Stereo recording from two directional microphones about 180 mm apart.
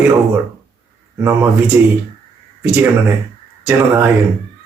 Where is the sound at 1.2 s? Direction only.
15° right (ahead or behind).